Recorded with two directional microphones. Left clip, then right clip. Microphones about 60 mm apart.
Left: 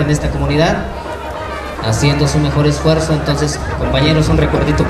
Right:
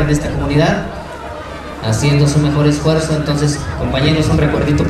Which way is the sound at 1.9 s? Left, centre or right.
Centre.